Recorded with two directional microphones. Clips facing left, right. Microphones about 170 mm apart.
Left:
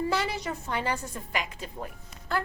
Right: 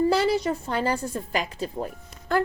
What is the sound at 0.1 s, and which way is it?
A woman's voice, 35° right (ahead or behind).